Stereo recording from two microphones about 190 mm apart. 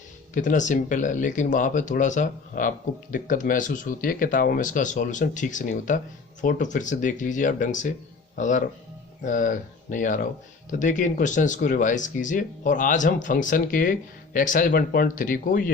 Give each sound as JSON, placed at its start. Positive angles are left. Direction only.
{"t": 0.3, "sound": "speech", "side_deg": 40}